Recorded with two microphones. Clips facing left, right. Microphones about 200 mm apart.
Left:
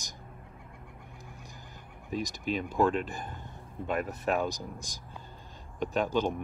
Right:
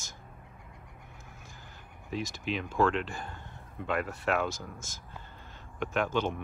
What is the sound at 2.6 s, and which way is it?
Speech, 15° left (ahead or behind).